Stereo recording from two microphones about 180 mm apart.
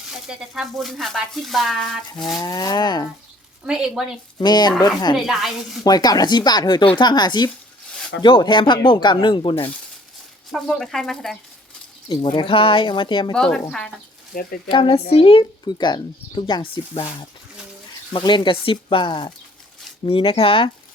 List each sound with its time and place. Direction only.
0.1 s speech: 5° right (ahead or behind)
2.4 s speech: 20° left (ahead or behind)
3.6 s speech: 5° right (ahead or behind)
4.4 s speech: 25° left (ahead or behind)
5.1 s speech: centre (ahead or behind)
5.8 s speech: 20° left (ahead or behind)
10.5 s speech: centre (ahead or behind)
12.0 s speech: 25° left (ahead or behind)
13.3 s speech: 5° left (ahead or behind)
14.3 s speech: 50° left (ahead or behind)
14.7 s speech: 30° left (ahead or behind)